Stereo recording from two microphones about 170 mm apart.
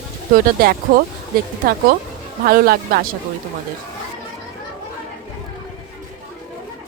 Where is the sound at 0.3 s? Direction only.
55° right (ahead or behind).